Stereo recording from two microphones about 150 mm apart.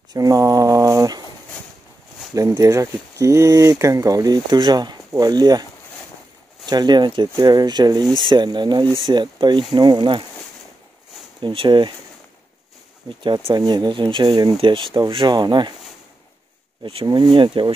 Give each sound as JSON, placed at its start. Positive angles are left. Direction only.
{"t": 0.1, "sound": "a sound", "side_deg": -25}
{"t": 2.3, "sound": "speech", "side_deg": -20}
{"t": 11.4, "sound": "speech", "side_deg": -35}
{"t": 13.2, "sound": "speech", "side_deg": -30}
{"t": 16.8, "sound": "speech", "side_deg": -30}